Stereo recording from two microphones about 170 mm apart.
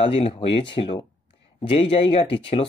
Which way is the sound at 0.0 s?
35° left (ahead or behind).